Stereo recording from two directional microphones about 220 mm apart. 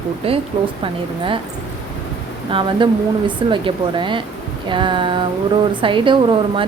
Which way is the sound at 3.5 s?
20° right (ahead or behind).